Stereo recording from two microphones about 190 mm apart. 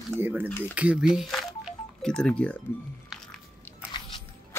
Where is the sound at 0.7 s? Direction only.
5° right (ahead or behind).